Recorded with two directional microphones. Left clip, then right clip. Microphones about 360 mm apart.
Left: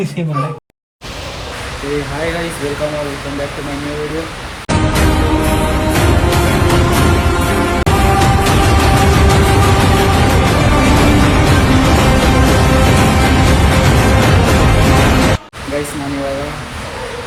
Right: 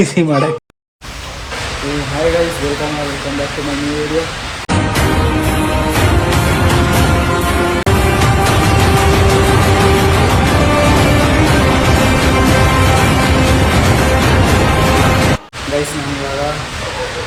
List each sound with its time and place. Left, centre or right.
4.7 s music: centre